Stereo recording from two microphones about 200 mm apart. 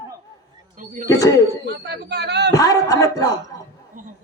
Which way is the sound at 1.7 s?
60° right (ahead or behind).